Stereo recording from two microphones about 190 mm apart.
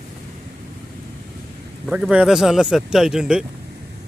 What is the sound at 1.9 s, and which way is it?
Speech, 5° right (ahead or behind).